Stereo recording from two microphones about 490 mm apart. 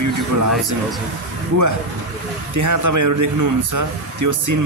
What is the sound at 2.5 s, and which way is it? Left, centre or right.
Speech, right.